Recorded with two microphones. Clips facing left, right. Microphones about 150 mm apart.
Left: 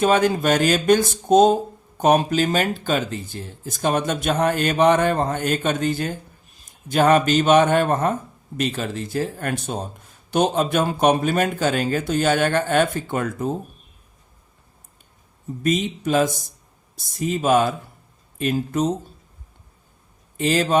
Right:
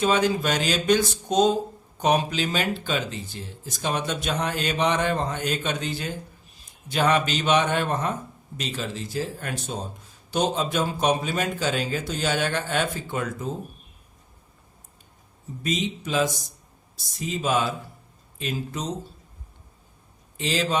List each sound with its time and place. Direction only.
0.0 s speech: 50° left (ahead or behind)
15.6 s speech: 55° left (ahead or behind)
20.3 s a man's voice: 50° left (ahead or behind)